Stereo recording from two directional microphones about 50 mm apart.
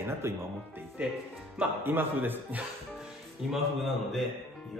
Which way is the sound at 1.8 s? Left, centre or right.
Right.